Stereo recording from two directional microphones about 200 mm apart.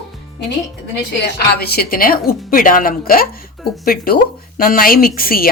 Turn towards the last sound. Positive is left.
turn(degrees=45)  # may be behind; listen again after turning